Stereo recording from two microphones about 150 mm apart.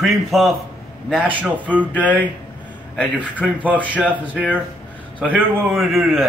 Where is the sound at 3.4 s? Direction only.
5° left (ahead or behind).